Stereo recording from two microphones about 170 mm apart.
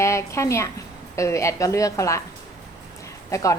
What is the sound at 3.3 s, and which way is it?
Speech, 20° left (ahead or behind).